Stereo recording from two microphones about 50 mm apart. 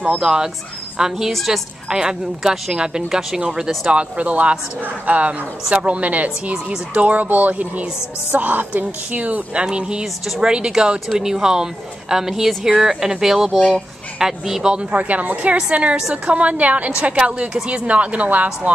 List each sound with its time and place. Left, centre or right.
0.2 s a woman's voice: centre
1.9 s a woman's voice: centre
10.2 s a woman's voice: centre
13.6 s speech: left
14.1 s speech: centre; by 18.7 s right